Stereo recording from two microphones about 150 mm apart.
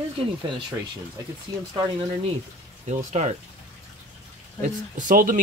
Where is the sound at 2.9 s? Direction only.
55° right (ahead or behind).